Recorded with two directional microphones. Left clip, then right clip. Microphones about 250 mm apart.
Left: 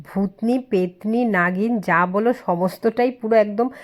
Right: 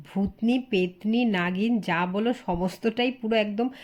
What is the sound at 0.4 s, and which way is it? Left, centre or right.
Speech, left.